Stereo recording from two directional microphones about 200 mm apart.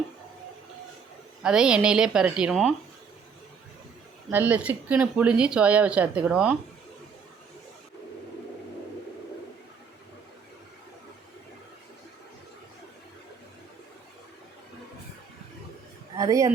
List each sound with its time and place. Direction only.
1.4 s speech: 5° right (ahead or behind)
4.3 s speech: 10° right (ahead or behind)
16.1 s a man's voice: 15° right (ahead or behind)